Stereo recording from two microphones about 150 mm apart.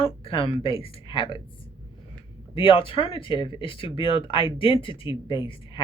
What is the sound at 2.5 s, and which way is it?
Speech, 35° left (ahead or behind).